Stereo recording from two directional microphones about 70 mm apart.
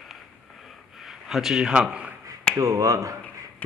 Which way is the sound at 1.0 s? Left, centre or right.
Centre.